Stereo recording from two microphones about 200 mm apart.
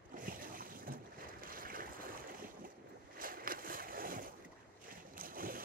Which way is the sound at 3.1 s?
45° right (ahead or behind).